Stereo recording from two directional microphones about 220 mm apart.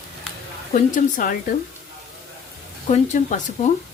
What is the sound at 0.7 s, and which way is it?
Speech, 35° left (ahead or behind).